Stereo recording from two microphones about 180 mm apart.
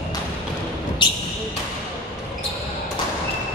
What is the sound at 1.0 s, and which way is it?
Basketball bounce, 25° left (ahead or behind).